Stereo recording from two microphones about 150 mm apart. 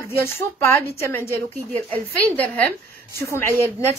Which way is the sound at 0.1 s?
15° left (ahead or behind).